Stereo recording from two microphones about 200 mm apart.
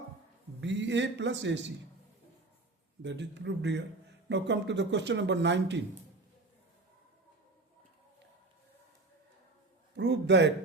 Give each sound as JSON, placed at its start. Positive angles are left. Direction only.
{"t": 0.6, "sound": "speech", "side_deg": -65}
{"t": 3.0, "sound": "speech", "side_deg": -60}
{"t": 9.9, "sound": "a man's voice", "side_deg": -60}